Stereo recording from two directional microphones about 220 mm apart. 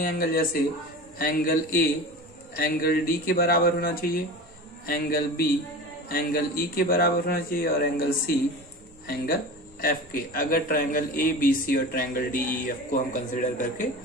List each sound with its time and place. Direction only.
0.0 s a man's voice: 40° left (ahead or behind)
9.0 s a man's voice: 45° left (ahead or behind)